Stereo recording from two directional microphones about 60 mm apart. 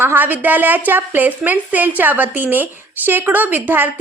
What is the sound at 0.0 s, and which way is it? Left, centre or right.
A woman's voice, right.